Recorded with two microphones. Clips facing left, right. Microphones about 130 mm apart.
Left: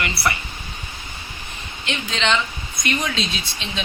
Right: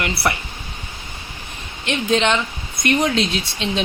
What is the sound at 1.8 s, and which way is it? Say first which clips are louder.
Speech: right 5 dB; 50° right (ahead or behind).